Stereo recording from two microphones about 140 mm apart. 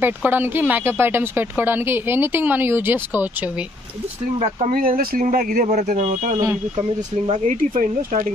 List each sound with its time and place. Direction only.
0.0 s speech: 15° right (ahead or behind)
4.4 s speech: 50° right (ahead or behind)
4.7 s speech: 85° right
5.7 s speech: 60° right (ahead or behind)
7.4 s speech: 70° right (ahead or behind)